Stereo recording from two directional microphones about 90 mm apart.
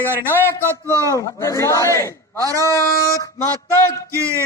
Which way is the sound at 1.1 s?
35° left (ahead or behind).